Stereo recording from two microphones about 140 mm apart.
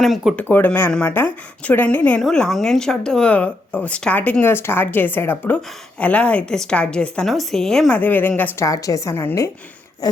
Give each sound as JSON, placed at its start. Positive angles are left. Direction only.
{"t": 0.0, "sound": "speech", "side_deg": 0}
{"t": 0.4, "sound": "speech", "side_deg": 15}